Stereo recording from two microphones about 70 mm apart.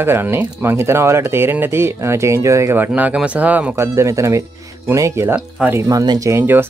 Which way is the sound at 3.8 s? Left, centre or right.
Right.